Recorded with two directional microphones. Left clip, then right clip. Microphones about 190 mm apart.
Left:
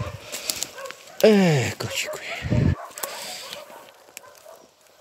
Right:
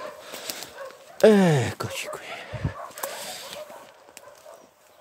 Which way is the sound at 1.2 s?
15° right (ahead or behind).